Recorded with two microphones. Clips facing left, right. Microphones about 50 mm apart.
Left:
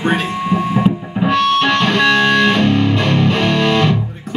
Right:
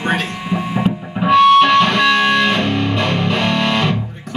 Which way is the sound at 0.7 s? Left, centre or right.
Centre.